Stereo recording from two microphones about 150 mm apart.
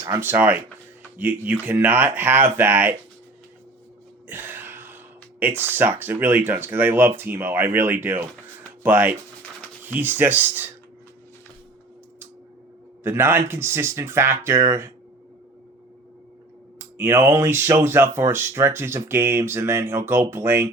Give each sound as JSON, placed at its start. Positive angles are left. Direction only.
{"t": 0.0, "sound": "speech", "side_deg": -15}
{"t": 4.3, "sound": "a sound", "side_deg": -15}
{"t": 5.4, "sound": "speech", "side_deg": -15}
{"t": 13.0, "sound": "speech", "side_deg": -15}
{"t": 16.7, "sound": "speech", "side_deg": -15}